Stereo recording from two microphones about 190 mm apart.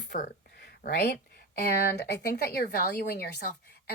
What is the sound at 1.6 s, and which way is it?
A woman's voice, 60° left (ahead or behind).